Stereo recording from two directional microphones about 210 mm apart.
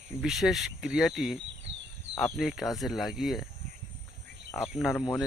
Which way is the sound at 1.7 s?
60° right (ahead or behind).